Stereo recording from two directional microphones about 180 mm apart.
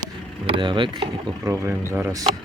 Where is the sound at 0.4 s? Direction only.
30° right (ahead or behind).